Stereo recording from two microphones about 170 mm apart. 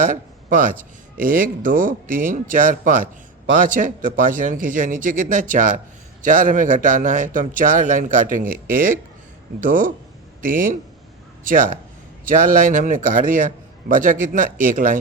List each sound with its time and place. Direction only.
0.0 s speech: 50° right (ahead or behind)